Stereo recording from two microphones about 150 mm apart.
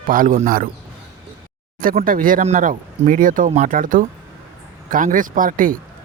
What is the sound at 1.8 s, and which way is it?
Speech, 70° right (ahead or behind).